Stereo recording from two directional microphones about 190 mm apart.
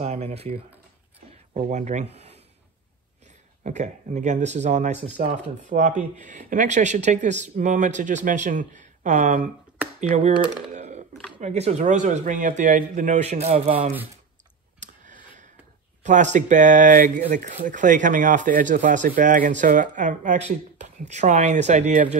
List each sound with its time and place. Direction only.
0.0 s speech: 35° right (ahead or behind)
3.6 s speech: 40° right (ahead or behind)
10.7 s typing: 40° right (ahead or behind)
11.3 s speech: 35° right (ahead or behind)
16.0 s speech: 40° right (ahead or behind)